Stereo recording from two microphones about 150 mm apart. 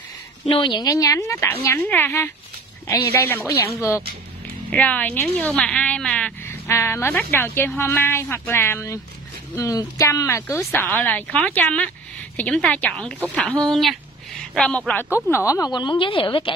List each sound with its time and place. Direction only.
0.5 s a woman's voice: 30° left (ahead or behind); by 15.0 s 10° left (ahead or behind)
15.2 s speech: 20° left (ahead or behind)